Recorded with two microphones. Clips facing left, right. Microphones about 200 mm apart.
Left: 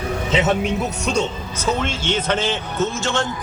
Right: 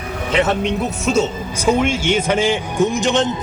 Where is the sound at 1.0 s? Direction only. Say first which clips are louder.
Right 4 dB; 5° right (ahead or behind).